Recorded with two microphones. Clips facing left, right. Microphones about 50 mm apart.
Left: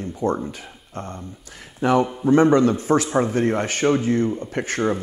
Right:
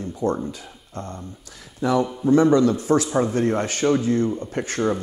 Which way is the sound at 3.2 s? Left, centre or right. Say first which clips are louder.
Left 1 dB; left.